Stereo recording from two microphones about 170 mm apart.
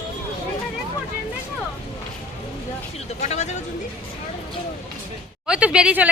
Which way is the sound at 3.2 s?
40° left (ahead or behind).